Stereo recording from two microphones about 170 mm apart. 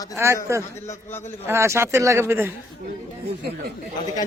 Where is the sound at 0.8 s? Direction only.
15° left (ahead or behind).